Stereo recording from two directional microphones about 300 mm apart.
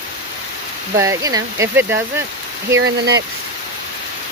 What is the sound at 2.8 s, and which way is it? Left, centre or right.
Speech, right.